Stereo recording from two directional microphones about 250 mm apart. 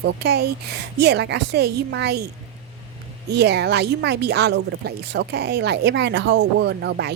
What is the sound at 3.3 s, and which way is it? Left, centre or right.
Speech, right.